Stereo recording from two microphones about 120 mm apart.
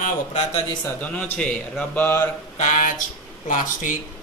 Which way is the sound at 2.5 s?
80° left.